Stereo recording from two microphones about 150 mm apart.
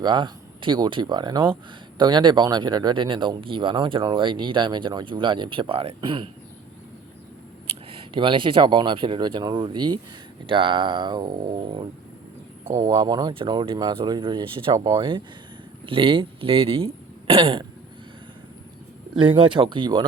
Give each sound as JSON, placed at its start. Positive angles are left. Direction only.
{"t": 0.0, "sound": "speech", "side_deg": -30}
{"t": 7.9, "sound": "speech", "side_deg": -35}
{"t": 19.1, "sound": "speech", "side_deg": -35}